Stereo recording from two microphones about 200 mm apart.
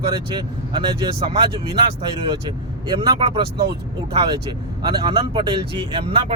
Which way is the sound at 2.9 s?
20° right (ahead or behind).